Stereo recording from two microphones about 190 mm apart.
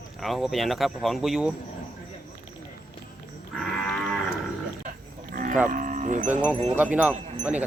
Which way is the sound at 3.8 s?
5° left (ahead or behind).